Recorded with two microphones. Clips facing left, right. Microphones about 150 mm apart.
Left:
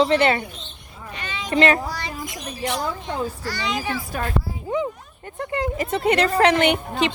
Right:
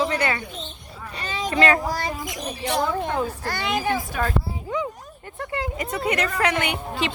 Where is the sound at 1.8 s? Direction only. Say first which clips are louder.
Right 4 dB; 45° right (ahead or behind).